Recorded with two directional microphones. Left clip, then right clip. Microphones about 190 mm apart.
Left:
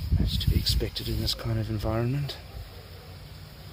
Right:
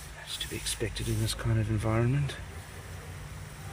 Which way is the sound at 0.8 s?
10° left (ahead or behind).